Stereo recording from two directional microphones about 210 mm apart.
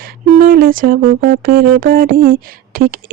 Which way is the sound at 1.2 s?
45° right (ahead or behind).